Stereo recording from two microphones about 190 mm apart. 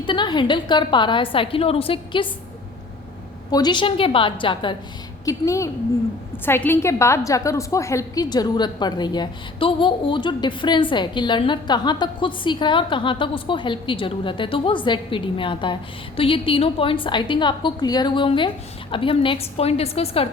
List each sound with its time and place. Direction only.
0.0 s a woman's voice: 25° left (ahead or behind)
3.5 s a woman's voice: 20° left (ahead or behind)